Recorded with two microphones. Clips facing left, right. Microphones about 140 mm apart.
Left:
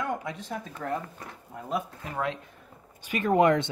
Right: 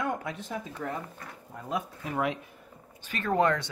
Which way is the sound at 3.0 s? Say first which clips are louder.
Left 4 dB; 15° left (ahead or behind).